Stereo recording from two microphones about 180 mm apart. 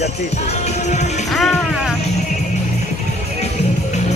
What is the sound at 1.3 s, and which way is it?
Music, centre (ahead or behind).